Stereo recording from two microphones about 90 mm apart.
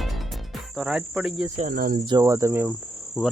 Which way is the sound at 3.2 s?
Centre (ahead or behind).